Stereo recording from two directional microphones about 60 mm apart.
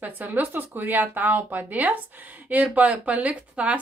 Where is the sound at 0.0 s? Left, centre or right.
Right.